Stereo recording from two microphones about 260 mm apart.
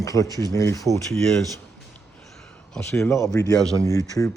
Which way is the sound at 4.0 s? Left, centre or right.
Centre.